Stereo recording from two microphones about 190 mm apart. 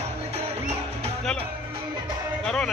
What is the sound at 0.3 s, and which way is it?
Music, 35° right (ahead or behind).